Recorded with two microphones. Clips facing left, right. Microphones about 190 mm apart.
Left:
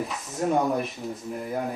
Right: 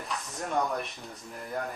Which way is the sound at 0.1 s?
Centre (ahead or behind).